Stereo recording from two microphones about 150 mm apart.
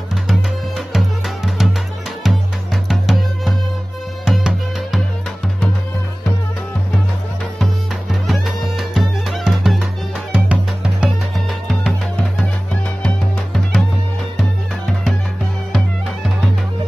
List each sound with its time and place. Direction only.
0.1 s music: centre (ahead or behind)
7.5 s music: centre (ahead or behind)
13.0 s music: centre (ahead or behind)